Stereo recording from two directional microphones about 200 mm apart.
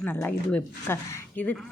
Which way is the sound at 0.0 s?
5° left (ahead or behind).